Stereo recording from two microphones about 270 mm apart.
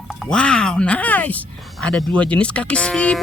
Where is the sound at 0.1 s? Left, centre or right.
Centre.